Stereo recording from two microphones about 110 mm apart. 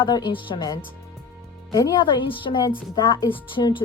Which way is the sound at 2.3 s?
50° left (ahead or behind).